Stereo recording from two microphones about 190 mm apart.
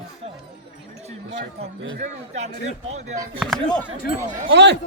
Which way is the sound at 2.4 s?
35° right (ahead or behind).